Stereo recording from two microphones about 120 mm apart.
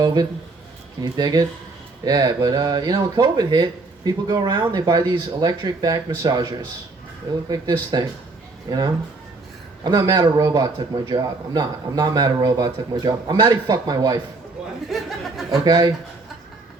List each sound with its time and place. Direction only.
0.0 s speech: 35° right (ahead or behind)
7.5 s speech: 35° right (ahead or behind)
14.8 s speech: centre (ahead or behind)
15.6 s speech: 35° right (ahead or behind)